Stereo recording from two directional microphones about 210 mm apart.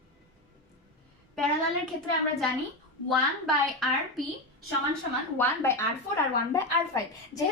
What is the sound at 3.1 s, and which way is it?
A woman's voice, centre (ahead or behind).